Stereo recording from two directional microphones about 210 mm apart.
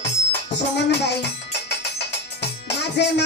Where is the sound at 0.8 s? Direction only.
55° left (ahead or behind).